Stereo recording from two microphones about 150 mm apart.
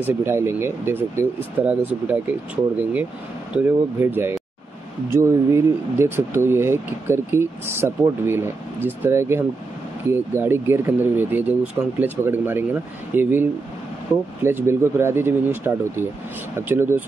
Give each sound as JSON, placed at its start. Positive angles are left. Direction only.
{"t": 0.0, "sound": "speech", "side_deg": -15}